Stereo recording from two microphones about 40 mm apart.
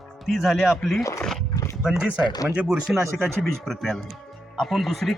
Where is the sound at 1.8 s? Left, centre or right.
Centre.